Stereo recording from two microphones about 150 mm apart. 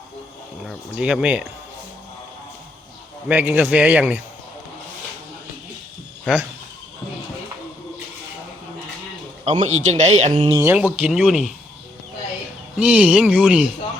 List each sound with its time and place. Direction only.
0.7 s speech: 5° right (ahead or behind)
3.2 s a man's voice: 10° right (ahead or behind)
9.4 s speech: 50° right (ahead or behind)
10.5 s a man's voice: 20° right (ahead or behind); by 11.4 s 5° right (ahead or behind)
12.7 s a man's voice: 10° right (ahead or behind)